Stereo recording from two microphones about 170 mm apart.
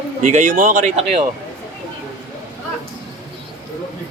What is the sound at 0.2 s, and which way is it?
Speech, 50° right (ahead or behind).